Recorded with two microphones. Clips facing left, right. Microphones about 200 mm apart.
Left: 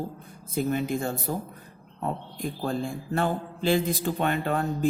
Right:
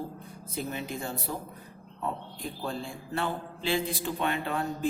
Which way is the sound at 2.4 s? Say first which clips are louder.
Left 6 dB; 45° left (ahead or behind).